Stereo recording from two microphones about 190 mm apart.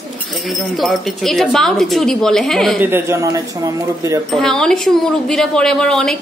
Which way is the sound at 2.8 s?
10° right (ahead or behind).